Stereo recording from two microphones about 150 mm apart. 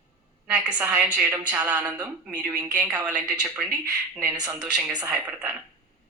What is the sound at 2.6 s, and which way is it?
Speech, 25° right (ahead or behind).